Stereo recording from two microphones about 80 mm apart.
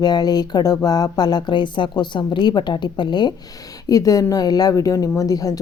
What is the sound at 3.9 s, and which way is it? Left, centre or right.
A woman's voice, left.